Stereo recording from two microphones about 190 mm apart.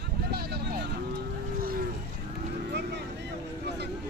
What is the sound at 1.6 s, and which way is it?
Cattle, 50° right (ahead or behind).